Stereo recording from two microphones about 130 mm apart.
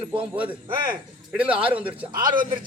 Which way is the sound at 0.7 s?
90° right.